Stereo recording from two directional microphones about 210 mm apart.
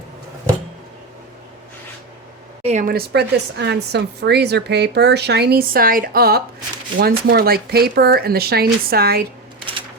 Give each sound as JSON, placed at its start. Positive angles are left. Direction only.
{"t": 2.6, "sound": "speech", "side_deg": -40}